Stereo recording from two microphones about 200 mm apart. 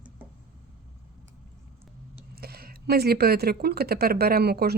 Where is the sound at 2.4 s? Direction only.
50° right (ahead or behind).